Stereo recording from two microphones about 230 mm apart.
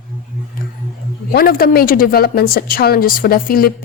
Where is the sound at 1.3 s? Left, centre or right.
Left.